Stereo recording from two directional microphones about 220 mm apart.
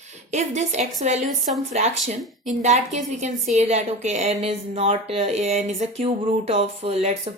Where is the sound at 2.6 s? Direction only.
30° right (ahead or behind).